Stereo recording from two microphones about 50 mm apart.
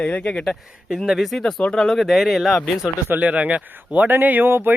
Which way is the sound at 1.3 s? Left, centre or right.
Centre.